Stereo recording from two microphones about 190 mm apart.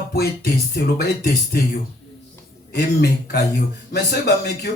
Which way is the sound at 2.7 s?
60° left (ahead or behind).